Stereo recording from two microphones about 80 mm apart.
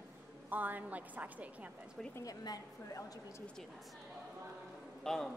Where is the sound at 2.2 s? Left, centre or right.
Left.